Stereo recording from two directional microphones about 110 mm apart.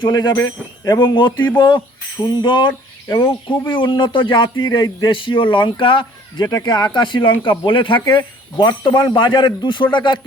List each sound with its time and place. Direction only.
0.0 s speech: 40° left (ahead or behind)
0.3 s speech: 30° left (ahead or behind)
0.9 s speech: 45° left (ahead or behind)
3.8 s speech: 45° left (ahead or behind)